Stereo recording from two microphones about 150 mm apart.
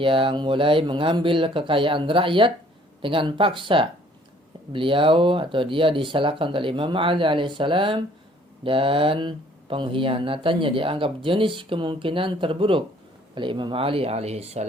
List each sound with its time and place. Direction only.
0.0 s speech: 35° right (ahead or behind)